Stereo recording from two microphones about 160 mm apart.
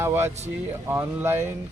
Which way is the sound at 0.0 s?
15° right (ahead or behind).